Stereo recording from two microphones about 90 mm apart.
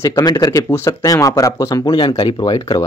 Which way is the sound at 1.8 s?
75° left (ahead or behind).